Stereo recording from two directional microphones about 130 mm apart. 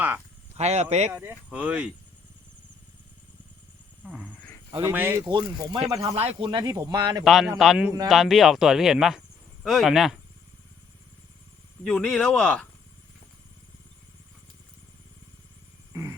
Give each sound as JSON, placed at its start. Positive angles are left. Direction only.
{"t": 0.5, "sound": "speech", "side_deg": -55}
{"t": 1.1, "sound": "speech", "side_deg": -15}
{"t": 4.0, "sound": "speech", "side_deg": -10}
{"t": 5.3, "sound": "speech", "side_deg": -35}
{"t": 6.1, "sound": "speech", "side_deg": -45}
{"t": 6.6, "sound": "speech", "side_deg": -25}
{"t": 7.3, "sound": "speech", "side_deg": 0}
{"t": 11.9, "sound": "speech", "side_deg": 5}
{"t": 15.9, "sound": "a sound", "side_deg": -25}